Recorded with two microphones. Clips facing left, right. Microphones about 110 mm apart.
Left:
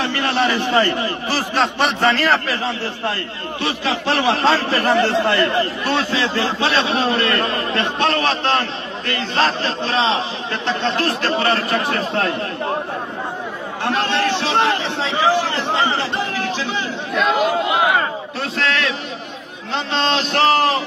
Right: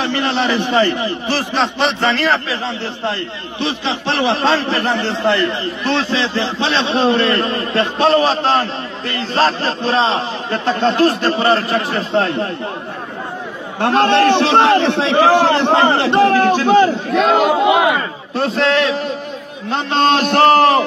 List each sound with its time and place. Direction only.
0.0 s a man's voice: 20° right (ahead or behind)
1.8 s a man's voice: 10° left (ahead or behind)
2.8 s a man's voice: 20° right (ahead or behind)
4.8 s a man's voice: 70° left (ahead or behind)
5.2 s a man's voice: 20° right (ahead or behind)
13.7 s a man's voice: 55° right (ahead or behind)
17.1 s a man's voice: 70° right (ahead or behind); by 17.7 s 90° right
18.4 s a man's voice: 30° right (ahead or behind)
19.7 s a man's voice: 50° right (ahead or behind)